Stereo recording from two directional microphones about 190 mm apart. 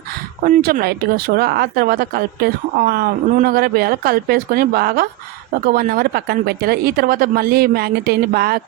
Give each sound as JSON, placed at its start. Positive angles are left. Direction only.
{"t": 0.4, "sound": "speech", "side_deg": -50}